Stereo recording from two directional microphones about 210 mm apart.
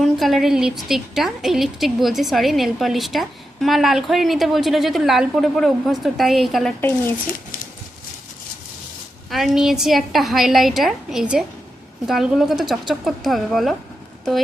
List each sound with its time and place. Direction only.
0.0 s a woman's voice: centre (ahead or behind)
9.3 s a woman's voice: centre (ahead or behind)